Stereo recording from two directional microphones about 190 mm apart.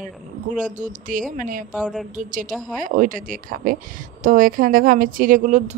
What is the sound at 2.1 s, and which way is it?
A woman's voice, 45° right (ahead or behind).